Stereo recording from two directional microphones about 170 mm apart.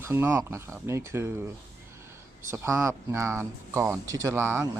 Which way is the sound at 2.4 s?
15° right (ahead or behind).